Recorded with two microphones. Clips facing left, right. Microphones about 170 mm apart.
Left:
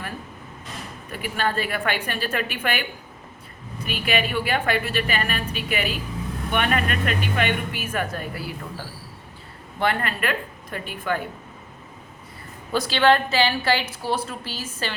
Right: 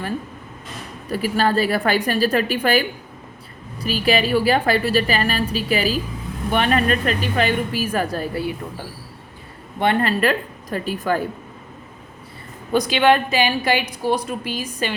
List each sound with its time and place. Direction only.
1.1 s a woman's voice: 35° right (ahead or behind)
9.7 s a woman's voice: 25° right (ahead or behind)
12.7 s a woman's voice: 15° right (ahead or behind)